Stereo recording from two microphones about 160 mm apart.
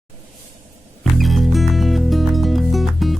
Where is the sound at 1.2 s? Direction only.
Centre (ahead or behind).